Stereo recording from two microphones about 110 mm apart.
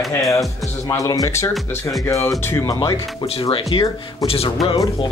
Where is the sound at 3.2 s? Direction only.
60° left (ahead or behind).